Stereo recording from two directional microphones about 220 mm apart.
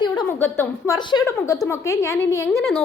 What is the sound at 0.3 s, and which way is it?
A woman's voice, 10° left (ahead or behind).